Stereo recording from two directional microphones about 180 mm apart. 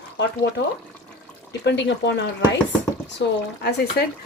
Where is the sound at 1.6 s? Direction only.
75° left (ahead or behind).